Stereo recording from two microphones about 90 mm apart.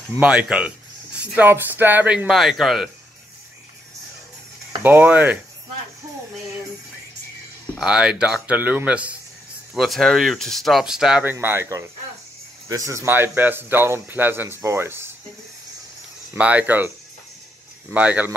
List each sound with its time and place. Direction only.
0.2 s speech: 10° right (ahead or behind)
2.3 s speech: 5° right (ahead or behind)
4.8 s speech: 20° right (ahead or behind)
7.8 s speech: 10° right (ahead or behind)
9.8 s speech: centre (ahead or behind)
11.3 s speech: 30° right (ahead or behind)
13.0 s speech: 25° right (ahead or behind)
16.3 s speech: 15° right (ahead or behind)
17.9 s speech: 15° right (ahead or behind)